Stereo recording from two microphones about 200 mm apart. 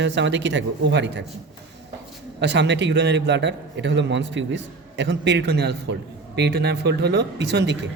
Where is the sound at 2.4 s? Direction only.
60° right (ahead or behind).